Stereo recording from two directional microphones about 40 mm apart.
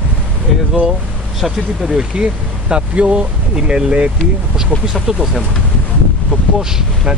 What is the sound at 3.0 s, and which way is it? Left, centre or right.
Speech, right.